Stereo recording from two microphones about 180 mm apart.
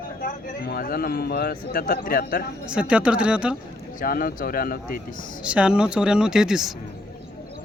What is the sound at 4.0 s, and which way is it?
Speech, 50° left (ahead or behind).